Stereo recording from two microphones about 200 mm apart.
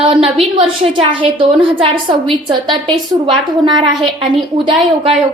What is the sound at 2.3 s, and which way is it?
A woman's voice, 25° right (ahead or behind).